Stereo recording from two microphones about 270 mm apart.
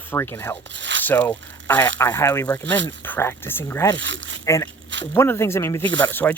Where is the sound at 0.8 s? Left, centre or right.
Right.